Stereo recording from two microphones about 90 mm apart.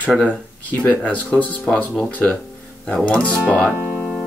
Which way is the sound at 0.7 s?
15° left (ahead or behind).